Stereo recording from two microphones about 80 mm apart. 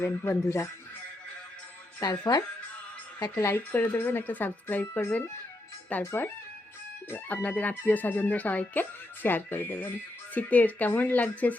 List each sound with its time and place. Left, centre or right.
0.0 s speech: left
2.0 s speech: left
3.2 s speech: left
7.1 s speech: centre